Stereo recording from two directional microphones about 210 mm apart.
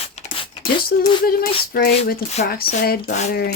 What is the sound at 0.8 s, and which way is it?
Speech, 45° left (ahead or behind).